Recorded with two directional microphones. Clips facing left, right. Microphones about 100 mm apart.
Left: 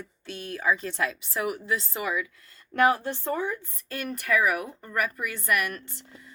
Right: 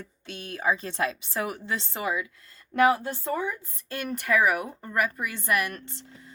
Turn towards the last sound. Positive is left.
turn(degrees=-25)  # may be behind; listen again after turning